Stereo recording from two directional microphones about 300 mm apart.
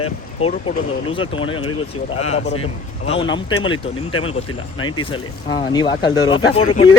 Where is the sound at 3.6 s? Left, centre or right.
Left.